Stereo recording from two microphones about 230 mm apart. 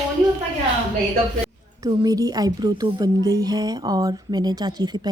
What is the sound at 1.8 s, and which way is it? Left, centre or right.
Speech, centre.